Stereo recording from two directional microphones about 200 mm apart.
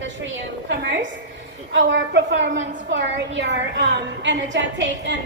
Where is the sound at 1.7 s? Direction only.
65° right (ahead or behind).